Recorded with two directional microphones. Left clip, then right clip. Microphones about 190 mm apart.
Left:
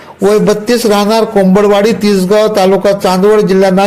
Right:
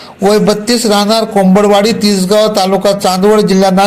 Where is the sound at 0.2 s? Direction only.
30° left (ahead or behind).